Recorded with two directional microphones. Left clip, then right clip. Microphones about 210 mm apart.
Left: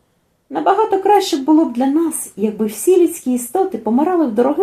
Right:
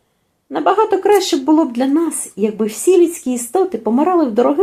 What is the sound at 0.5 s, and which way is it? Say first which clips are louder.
A woman's voice: right 1 dB; 30° right (ahead or behind).